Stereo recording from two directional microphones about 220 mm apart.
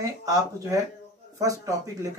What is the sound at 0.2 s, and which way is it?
Speech, 15° right (ahead or behind).